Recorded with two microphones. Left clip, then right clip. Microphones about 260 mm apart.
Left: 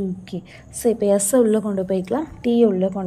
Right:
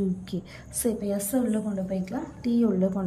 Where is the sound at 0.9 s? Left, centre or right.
Centre.